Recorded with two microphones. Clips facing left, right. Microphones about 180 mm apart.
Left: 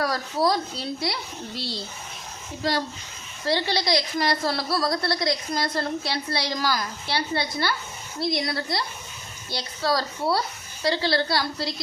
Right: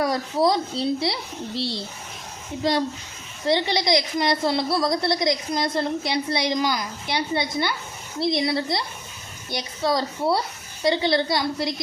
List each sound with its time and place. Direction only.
0.4 s a woman's voice: 25° right (ahead or behind)